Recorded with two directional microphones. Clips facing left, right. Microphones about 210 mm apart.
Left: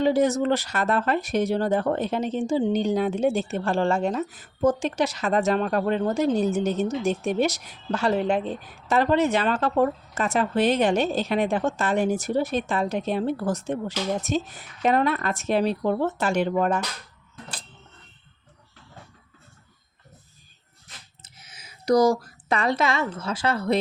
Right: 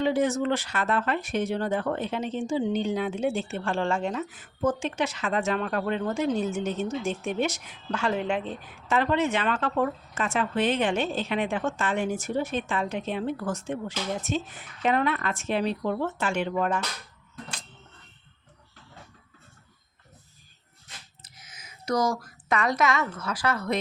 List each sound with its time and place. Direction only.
0.0 s speech: 40° left (ahead or behind)
21.2 s a sound: 25° left (ahead or behind)
23.0 s a woman's voice: 25° left (ahead or behind)